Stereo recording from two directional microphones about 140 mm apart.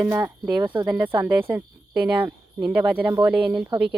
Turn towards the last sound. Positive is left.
turn(degrees=-10)  # may be behind; listen again after turning